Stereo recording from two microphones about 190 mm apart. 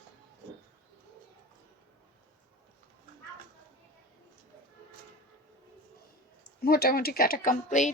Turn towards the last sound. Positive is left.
turn(degrees=45)  # may be behind; listen again after turning